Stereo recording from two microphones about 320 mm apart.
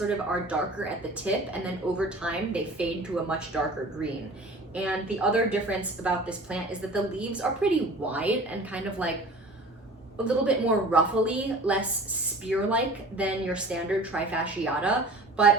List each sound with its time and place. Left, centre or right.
0.1 s a woman's voice: centre
10.2 s a woman's voice: centre